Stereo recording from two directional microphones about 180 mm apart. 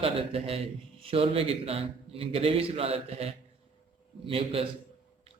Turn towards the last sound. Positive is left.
turn(degrees=-30)  # may be behind; listen again after turning